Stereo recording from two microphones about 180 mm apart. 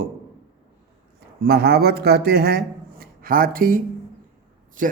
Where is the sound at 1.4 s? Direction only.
60° right (ahead or behind).